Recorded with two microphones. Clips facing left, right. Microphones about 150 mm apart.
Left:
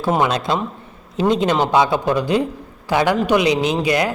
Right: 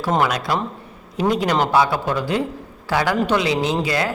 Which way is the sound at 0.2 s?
25° left (ahead or behind).